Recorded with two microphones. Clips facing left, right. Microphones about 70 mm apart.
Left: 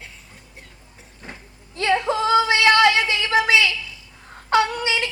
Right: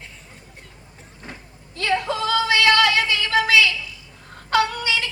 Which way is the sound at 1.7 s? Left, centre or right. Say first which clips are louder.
Left 2 dB; left.